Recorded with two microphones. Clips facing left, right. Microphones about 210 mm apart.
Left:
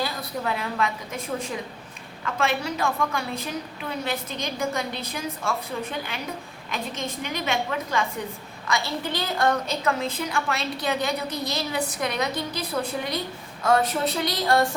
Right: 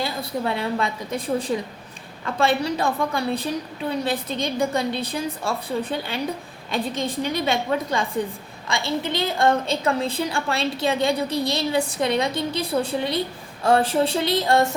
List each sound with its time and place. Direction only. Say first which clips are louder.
0.0 s a woman's voice: right 3 dB; 30° right (ahead or behind)